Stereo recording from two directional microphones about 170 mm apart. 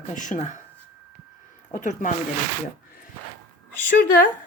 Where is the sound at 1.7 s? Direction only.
50° left (ahead or behind).